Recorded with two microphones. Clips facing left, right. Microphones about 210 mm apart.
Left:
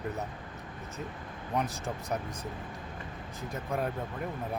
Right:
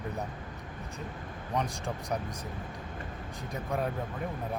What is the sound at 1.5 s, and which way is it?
Speech, 5° left (ahead or behind).